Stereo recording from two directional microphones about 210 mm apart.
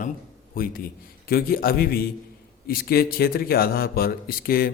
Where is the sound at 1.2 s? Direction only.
45° left (ahead or behind).